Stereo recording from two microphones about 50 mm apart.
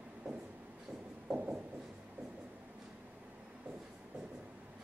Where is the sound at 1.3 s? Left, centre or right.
Centre.